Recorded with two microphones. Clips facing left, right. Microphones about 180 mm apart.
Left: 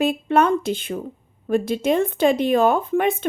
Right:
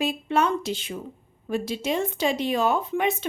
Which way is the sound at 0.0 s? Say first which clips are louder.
Left 5 dB; 55° left (ahead or behind).